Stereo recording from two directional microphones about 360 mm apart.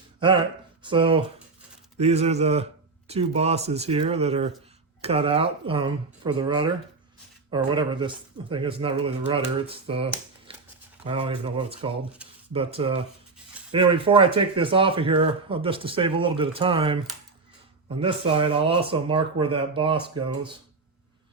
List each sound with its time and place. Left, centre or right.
0.8 s speech: centre
10.5 s a sound: centre
11.0 s speech: centre
12.2 s a sound: centre
12.5 s speech: centre
18.0 s speech: centre